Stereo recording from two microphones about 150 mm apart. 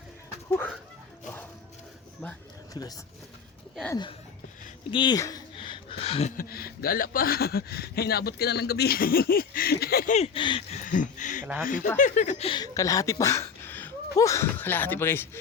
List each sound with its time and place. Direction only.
2.8 s speech: 25° left (ahead or behind)
4.9 s speech: 30° left (ahead or behind)
6.3 s speech: 85° left
10.2 s speech: 35° left (ahead or behind)
10.8 s a sound: 60° left (ahead or behind)
11.6 s speech: 65° left (ahead or behind)
11.9 s a sound: 60° left (ahead or behind)
12.5 s speech: 25° left (ahead or behind)